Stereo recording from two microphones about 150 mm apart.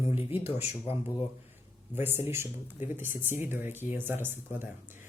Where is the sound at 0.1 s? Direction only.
15° right (ahead or behind).